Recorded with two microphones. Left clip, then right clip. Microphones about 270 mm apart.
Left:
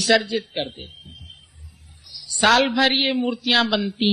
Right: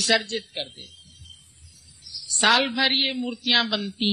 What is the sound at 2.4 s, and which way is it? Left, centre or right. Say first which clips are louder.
Speech: left 3 dB; right.